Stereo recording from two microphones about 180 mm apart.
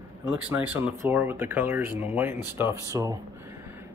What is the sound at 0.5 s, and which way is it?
Speech, 10° right (ahead or behind).